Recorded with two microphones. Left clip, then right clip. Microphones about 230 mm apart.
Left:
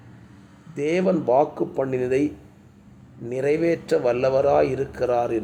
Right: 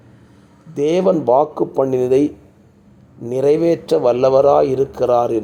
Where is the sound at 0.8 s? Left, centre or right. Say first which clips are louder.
Right 7 dB; centre.